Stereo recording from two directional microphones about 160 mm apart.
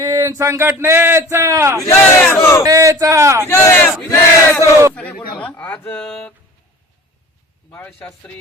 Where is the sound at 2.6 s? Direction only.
20° right (ahead or behind).